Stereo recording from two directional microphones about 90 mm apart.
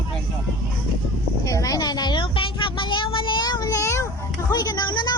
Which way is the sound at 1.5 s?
40° left (ahead or behind).